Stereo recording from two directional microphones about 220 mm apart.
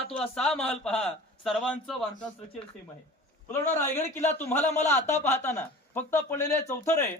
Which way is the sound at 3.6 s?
35° left (ahead or behind).